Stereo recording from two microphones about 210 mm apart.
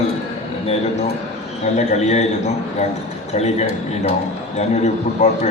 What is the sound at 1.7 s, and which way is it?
A man's voice, 35° left (ahead or behind).